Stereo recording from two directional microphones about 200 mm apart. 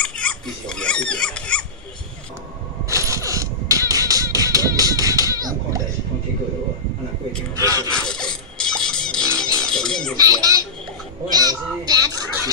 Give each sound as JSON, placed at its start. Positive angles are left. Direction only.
{"t": 0.0, "sound": "pig", "side_deg": 5}
{"t": 2.9, "sound": "music", "side_deg": -15}
{"t": 7.6, "sound": "a sound", "side_deg": -15}
{"t": 7.9, "sound": "music", "side_deg": 5}
{"t": 10.1, "sound": "a sound", "side_deg": -20}
{"t": 11.2, "sound": "crow", "side_deg": -20}